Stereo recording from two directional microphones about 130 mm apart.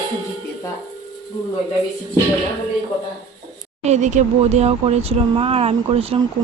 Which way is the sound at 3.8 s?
60° right (ahead or behind).